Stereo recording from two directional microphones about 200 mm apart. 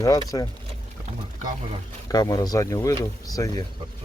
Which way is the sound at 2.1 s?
20° left (ahead or behind).